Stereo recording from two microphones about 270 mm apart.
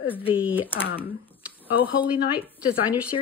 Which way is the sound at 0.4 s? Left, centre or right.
Centre.